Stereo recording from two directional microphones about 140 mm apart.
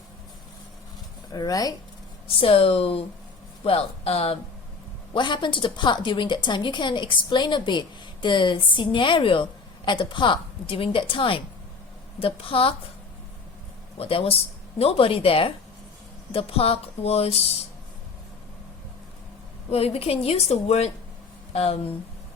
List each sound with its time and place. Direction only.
1.3 s speech: 25° left (ahead or behind)
2.4 s a woman's voice: 45° left (ahead or behind)
5.1 s a woman's voice: 35° left (ahead or behind)
14.0 s a woman's voice: 45° left (ahead or behind)
19.7 s a woman's voice: 45° left (ahead or behind)